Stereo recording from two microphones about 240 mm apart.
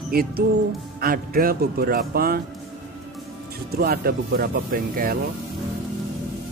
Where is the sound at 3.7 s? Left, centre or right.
Right.